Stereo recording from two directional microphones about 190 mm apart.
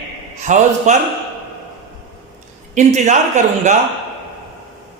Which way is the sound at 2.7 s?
40° right (ahead or behind).